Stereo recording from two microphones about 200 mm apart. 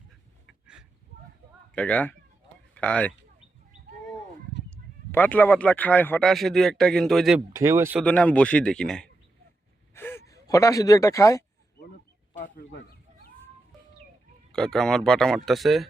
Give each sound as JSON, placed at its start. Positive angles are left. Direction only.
{"t": 0.4, "sound": "a sound", "side_deg": -5}
{"t": 1.7, "sound": "speech", "side_deg": 5}
{"t": 4.7, "sound": "speech", "side_deg": 10}
{"t": 7.5, "sound": "speech", "side_deg": -15}
{"t": 8.0, "sound": "speech", "side_deg": 5}
{"t": 14.5, "sound": "speech", "side_deg": 5}